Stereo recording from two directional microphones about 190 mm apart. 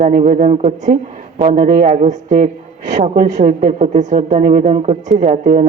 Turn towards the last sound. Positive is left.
turn(degrees=-40)  # may be behind; listen again after turning